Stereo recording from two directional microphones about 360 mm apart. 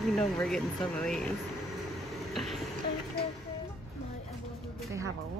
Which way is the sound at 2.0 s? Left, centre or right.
Centre.